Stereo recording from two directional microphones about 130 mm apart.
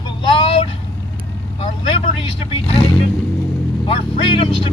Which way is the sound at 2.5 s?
45° left (ahead or behind).